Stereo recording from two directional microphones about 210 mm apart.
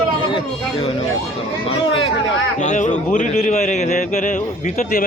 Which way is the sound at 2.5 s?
35° left (ahead or behind).